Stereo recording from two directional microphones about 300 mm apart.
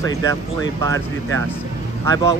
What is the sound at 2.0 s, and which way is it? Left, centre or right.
Speech, centre.